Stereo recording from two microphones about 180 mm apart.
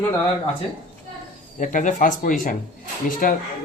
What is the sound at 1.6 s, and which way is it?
Speech, 45° left (ahead or behind).